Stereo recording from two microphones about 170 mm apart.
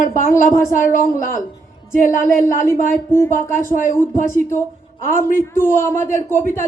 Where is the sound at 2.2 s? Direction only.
15° left (ahead or behind).